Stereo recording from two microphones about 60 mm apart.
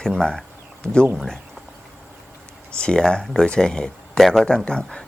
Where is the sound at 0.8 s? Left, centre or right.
Right.